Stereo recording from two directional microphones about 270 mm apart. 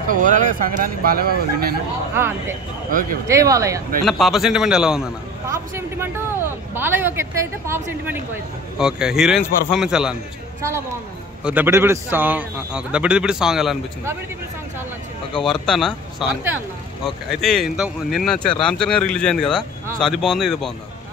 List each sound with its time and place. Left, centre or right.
0.1 s speech: right
2.1 s speech: centre
2.9 s speech: right
3.3 s speech: centre
4.0 s speech: centre
11.4 s speech: centre
15.3 s speech: centre